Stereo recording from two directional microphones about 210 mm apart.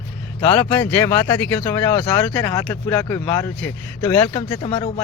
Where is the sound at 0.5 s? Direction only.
10° left (ahead or behind).